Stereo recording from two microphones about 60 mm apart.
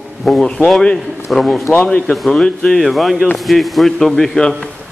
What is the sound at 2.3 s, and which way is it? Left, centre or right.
Speech, centre.